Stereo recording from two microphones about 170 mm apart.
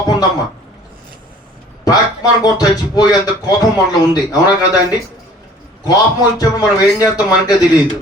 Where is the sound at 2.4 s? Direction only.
20° left (ahead or behind).